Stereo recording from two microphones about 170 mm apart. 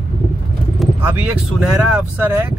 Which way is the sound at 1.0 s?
10° right (ahead or behind).